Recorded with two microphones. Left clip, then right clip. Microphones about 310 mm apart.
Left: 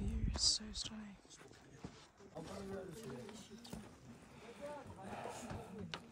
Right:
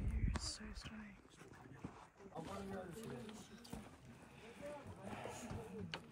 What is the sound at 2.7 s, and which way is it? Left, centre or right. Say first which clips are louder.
Speech: left 1 dB; centre.